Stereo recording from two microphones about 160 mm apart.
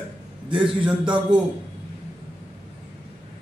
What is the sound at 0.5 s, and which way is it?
Speech, 30° right (ahead or behind).